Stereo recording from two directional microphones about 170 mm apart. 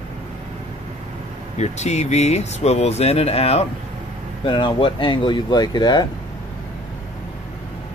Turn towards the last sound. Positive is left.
turn(degrees=25)  # may be behind; listen again after turning